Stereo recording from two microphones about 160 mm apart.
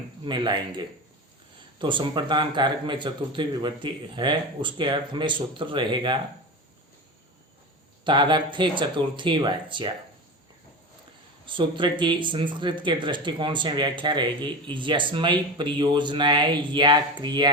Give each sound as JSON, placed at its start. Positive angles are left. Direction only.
{"t": 0.3, "sound": "speech", "side_deg": -30}
{"t": 8.0, "sound": "speech", "side_deg": -30}
{"t": 11.4, "sound": "speech", "side_deg": -30}